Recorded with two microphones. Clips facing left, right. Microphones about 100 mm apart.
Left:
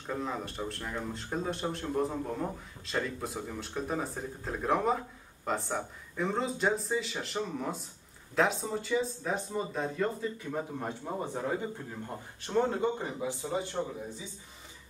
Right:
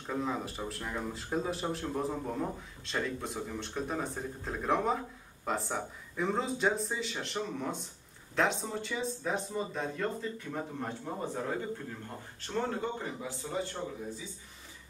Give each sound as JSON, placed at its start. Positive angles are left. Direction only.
{"t": 0.0, "sound": "speech", "side_deg": 0}
{"t": 11.9, "sound": "a man's voice", "side_deg": 15}